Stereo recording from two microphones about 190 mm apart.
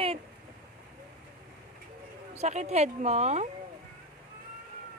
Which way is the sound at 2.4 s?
35° right (ahead or behind).